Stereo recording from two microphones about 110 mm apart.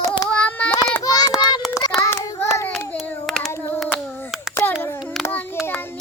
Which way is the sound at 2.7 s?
5° left (ahead or behind).